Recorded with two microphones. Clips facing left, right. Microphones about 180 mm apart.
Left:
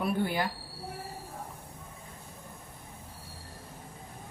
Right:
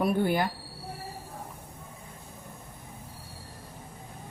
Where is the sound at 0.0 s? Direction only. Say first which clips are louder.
Right 4 dB; 50° right (ahead or behind).